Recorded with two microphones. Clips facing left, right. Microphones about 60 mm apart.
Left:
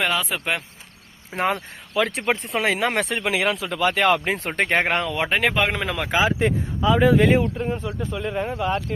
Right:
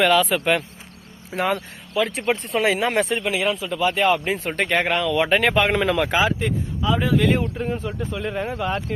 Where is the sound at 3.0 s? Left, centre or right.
Left.